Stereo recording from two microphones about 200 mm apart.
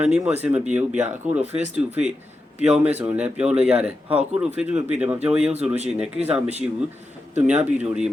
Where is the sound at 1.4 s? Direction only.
30° right (ahead or behind).